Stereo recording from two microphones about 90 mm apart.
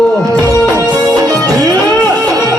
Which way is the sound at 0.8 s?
45° right (ahead or behind).